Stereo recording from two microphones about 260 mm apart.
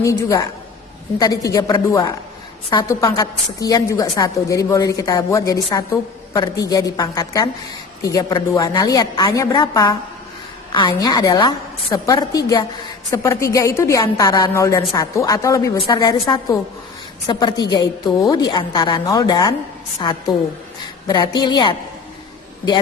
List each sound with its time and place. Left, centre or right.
0.0 s a woman's voice: centre